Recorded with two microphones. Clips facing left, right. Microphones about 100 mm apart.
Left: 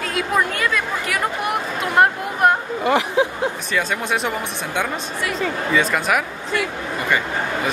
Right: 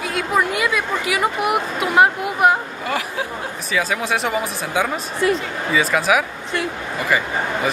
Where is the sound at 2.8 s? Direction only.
20° left (ahead or behind).